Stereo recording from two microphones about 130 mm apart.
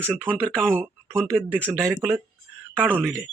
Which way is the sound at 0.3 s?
10° left (ahead or behind).